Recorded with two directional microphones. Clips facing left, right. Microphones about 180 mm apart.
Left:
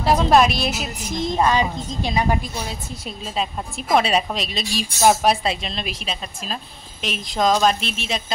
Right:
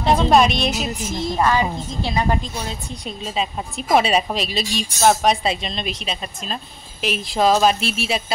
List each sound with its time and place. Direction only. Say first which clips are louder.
0.0 s a woman's voice: right 1 dB; 5° left (ahead or behind)
1.0 s a woman's voice: left 1 dB; 15° left (ahead or behind)
3.1 s a woman's voice: right 1 dB; centre (ahead or behind)